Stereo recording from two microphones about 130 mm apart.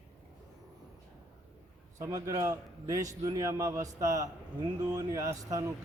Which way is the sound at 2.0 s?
25° right (ahead or behind).